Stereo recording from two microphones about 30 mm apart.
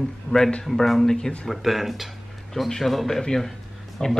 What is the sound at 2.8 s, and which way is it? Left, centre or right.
Speech, centre.